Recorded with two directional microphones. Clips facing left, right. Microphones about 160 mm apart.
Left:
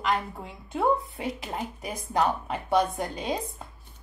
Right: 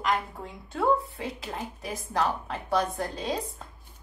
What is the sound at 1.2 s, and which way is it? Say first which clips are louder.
A woman's voice: left 2 dB; 15° left (ahead or behind).